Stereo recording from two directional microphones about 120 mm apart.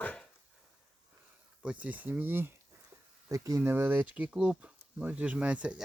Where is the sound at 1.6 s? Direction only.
10° right (ahead or behind).